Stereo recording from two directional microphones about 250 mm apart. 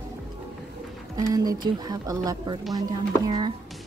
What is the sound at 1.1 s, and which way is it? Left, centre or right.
Speech, centre.